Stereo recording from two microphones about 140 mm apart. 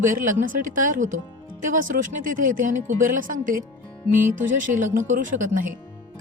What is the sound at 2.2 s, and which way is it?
A woman's voice, 70° right (ahead or behind).